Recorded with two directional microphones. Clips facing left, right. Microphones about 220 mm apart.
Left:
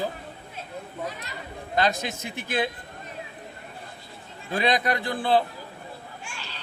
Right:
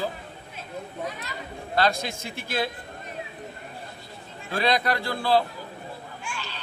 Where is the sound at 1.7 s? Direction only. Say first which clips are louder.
Even; 15° left (ahead or behind).